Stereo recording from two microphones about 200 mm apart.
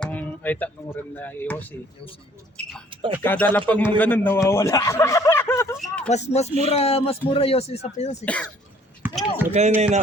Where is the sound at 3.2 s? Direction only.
10° left (ahead or behind).